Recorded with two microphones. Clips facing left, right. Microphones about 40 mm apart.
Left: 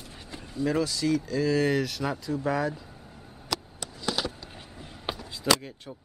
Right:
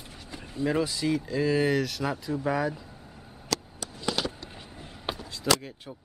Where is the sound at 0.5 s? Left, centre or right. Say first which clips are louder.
Even; right.